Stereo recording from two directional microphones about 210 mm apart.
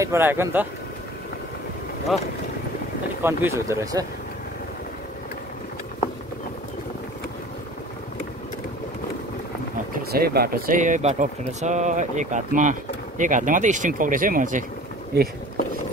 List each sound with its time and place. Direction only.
0.0 s speech: 10° right (ahead or behind)
3.2 s speech: 10° right (ahead or behind)
10.1 s speech: 45° right (ahead or behind)